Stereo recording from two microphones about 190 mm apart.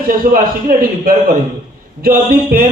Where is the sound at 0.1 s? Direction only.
50° right (ahead or behind).